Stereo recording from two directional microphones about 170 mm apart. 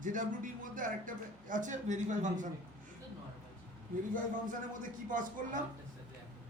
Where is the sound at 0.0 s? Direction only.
50° right (ahead or behind).